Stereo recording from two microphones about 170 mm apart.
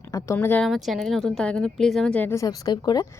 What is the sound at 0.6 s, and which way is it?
Speech, centre (ahead or behind).